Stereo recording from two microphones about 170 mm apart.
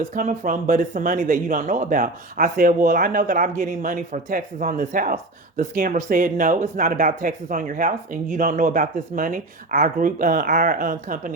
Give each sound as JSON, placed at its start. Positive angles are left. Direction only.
{"t": 0.1, "sound": "speech", "side_deg": -50}